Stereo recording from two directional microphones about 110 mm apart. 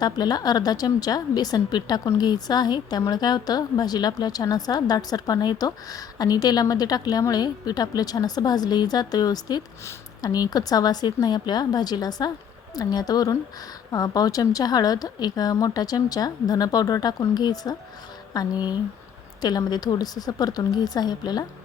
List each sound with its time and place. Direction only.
0.0 s a woman's voice: 35° left (ahead or behind)